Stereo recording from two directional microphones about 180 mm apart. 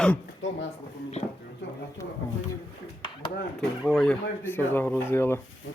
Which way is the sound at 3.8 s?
Centre (ahead or behind).